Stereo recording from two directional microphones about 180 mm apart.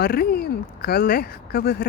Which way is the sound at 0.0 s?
60° left (ahead or behind).